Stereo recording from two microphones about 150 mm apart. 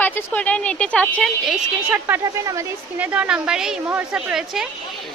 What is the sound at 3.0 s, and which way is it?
A woman's voice, 5° right (ahead or behind).